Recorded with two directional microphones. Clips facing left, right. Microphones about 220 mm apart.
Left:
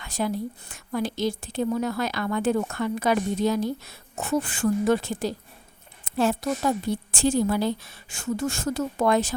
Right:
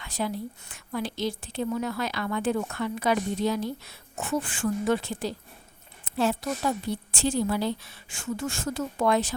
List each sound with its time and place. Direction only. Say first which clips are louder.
0.0 s a woman's voice: left 3 dB; 45° left (ahead or behind)